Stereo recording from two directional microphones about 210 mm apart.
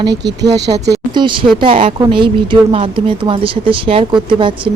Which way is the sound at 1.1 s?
20° right (ahead or behind).